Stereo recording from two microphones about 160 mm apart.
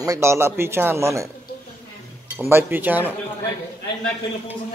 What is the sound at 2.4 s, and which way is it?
Speech, 15° right (ahead or behind).